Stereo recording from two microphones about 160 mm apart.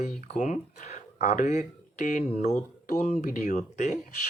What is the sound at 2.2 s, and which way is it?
Speech, 40° left (ahead or behind).